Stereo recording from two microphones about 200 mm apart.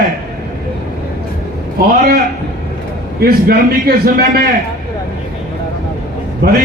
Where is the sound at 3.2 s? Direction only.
50° right (ahead or behind).